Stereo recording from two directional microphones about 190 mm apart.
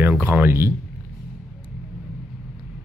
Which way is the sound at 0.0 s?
10° right (ahead or behind).